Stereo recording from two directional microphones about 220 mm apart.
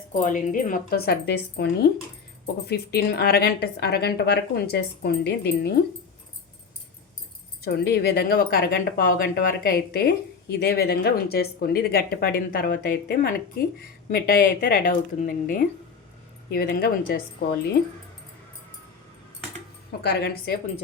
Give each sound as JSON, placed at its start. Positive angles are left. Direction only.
{"t": 0.1, "sound": "speech", "side_deg": 35}
{"t": 7.6, "sound": "speech", "side_deg": 45}
{"t": 20.0, "sound": "speech", "side_deg": 50}